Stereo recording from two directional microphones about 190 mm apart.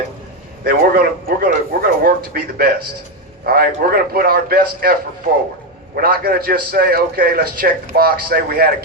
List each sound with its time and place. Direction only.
0.6 s a man's voice: 50° right (ahead or behind)
6.0 s a man's voice: 55° right (ahead or behind)